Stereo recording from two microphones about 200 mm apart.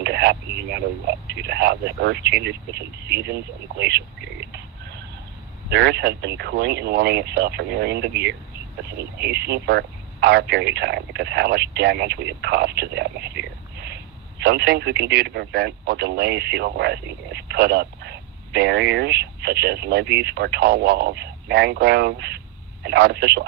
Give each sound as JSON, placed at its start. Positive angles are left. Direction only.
{"t": 0.0, "sound": "speech", "side_deg": -55}
{"t": 5.7, "sound": "speech", "side_deg": -55}